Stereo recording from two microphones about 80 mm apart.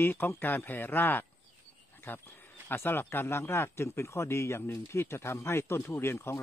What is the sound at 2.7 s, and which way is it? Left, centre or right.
Speech, left.